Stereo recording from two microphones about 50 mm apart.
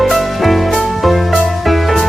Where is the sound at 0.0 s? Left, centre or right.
Centre.